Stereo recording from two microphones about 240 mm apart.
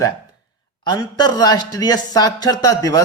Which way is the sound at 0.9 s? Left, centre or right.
Centre.